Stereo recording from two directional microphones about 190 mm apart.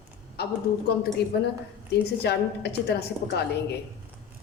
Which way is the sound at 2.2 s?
60° left (ahead or behind).